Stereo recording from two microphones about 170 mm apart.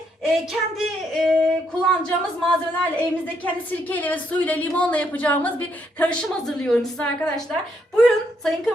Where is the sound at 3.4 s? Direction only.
10° left (ahead or behind).